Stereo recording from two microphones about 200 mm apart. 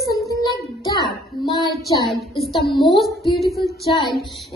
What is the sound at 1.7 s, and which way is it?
Speech, centre (ahead or behind).